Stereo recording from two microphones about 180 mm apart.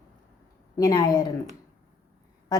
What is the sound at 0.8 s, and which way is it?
Speech, 20° left (ahead or behind).